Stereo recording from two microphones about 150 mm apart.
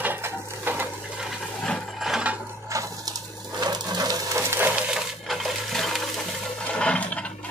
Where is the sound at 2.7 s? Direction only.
25° right (ahead or behind); by 6.0 s centre (ahead or behind).